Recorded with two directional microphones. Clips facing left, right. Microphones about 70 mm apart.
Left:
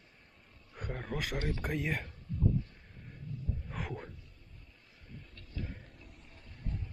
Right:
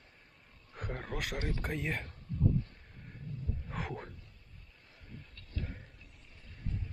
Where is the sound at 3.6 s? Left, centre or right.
Centre.